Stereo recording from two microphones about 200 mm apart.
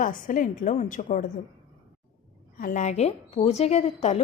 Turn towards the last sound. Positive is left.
turn(degrees=35)  # may be behind; listen again after turning